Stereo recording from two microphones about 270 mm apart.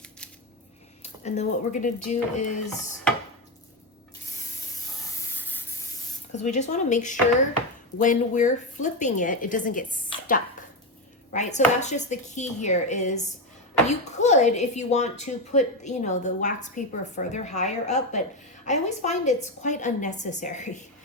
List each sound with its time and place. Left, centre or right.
1.0 s speech: left
5.2 s spray: centre
6.3 s speech: left
10.1 s a sound: centre
11.3 s speech: left